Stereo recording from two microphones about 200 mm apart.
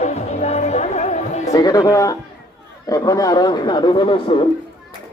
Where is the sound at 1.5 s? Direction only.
20° left (ahead or behind).